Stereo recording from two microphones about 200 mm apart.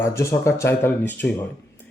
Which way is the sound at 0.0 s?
15° left (ahead or behind).